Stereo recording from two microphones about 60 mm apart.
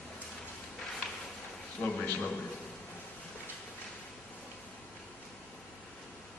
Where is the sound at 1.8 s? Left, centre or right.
Centre.